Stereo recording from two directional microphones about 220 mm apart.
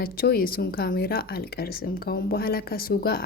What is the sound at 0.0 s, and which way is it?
Speech, 40° left (ahead or behind).